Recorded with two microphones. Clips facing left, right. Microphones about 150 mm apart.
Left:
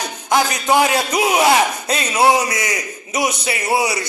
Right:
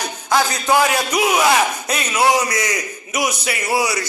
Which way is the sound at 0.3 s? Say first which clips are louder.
Left 1 dB; 20° left (ahead or behind).